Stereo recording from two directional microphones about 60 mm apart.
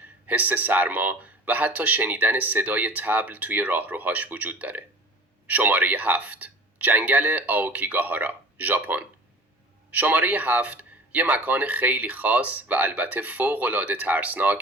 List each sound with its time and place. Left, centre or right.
0.3 s speech: right
9.9 s speech: right